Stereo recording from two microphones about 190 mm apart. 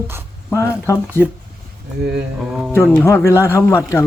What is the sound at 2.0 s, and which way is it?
Mantra, 60° right (ahead or behind).